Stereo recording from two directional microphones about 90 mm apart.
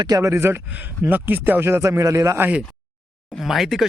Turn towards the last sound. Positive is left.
turn(degrees=-5)  # may be behind; listen again after turning